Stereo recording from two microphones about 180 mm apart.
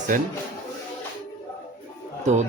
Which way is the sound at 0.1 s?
45° right (ahead or behind).